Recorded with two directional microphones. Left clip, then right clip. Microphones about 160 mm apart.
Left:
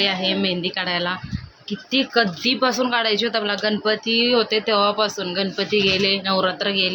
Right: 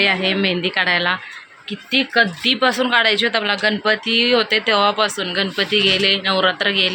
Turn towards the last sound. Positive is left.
turn(degrees=0)  # may be behind; listen again after turning